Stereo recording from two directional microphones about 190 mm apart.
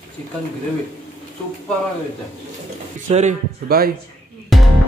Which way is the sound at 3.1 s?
40° right (ahead or behind).